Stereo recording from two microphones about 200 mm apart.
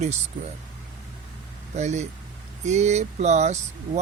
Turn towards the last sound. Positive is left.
turn(degrees=-35)  # may be behind; listen again after turning